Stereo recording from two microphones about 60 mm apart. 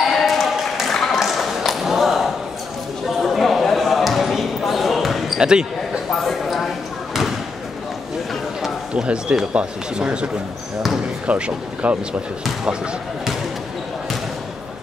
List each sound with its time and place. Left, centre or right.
0.0 s basketball bounce: centre
0.9 s tap: centre
1.2 s a sound: centre
3.2 s basketball bounce: centre
5.4 s speech: centre
5.8 s a sound: centre
8.9 s speech: centre